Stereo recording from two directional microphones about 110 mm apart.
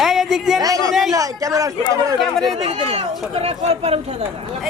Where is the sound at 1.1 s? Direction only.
30° right (ahead or behind).